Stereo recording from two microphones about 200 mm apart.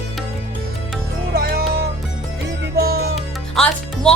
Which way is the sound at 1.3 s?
50° right (ahead or behind).